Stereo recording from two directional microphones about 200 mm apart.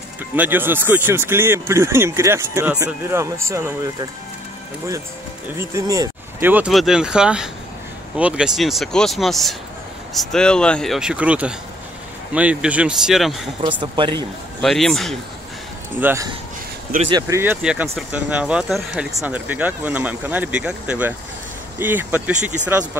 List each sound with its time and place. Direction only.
0.4 s speech: 10° right (ahead or behind)
5.6 s speech: 15° right (ahead or behind)
13.6 s speech: 25° right (ahead or behind)
14.6 s speech: centre (ahead or behind)
16.0 s speech: 10° right (ahead or behind)